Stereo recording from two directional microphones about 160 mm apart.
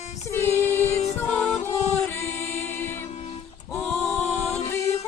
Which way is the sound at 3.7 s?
5° left (ahead or behind).